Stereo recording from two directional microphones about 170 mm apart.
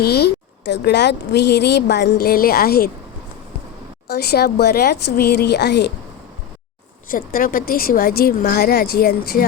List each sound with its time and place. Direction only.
0.0 s a woman's voice: 70° left (ahead or behind)
4.1 s a woman's voice: 70° left (ahead or behind)
7.1 s speech: 55° left (ahead or behind)